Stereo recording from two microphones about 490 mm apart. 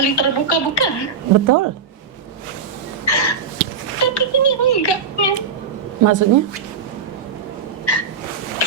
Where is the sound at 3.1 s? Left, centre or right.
Left.